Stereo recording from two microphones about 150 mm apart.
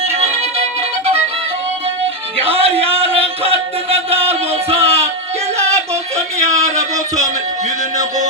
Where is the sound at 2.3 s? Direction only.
40° right (ahead or behind).